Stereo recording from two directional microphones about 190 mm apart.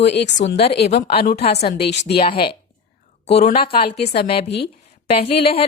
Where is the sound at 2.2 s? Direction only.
25° left (ahead or behind).